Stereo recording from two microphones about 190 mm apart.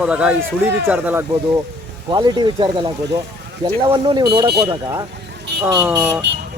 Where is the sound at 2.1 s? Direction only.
20° right (ahead or behind).